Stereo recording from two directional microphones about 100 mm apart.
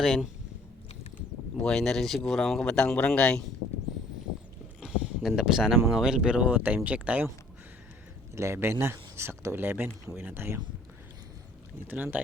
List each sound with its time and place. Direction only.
0.0 s speech: centre (ahead or behind)
1.5 s speech: 5° left (ahead or behind)
4.8 s a sound: 5° right (ahead or behind)
5.4 s speech: 5° right (ahead or behind)
8.4 s speech: 25° right (ahead or behind)
11.9 s speech: 15° right (ahead or behind)